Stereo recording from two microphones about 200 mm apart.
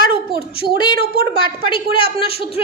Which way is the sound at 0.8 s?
25° left (ahead or behind).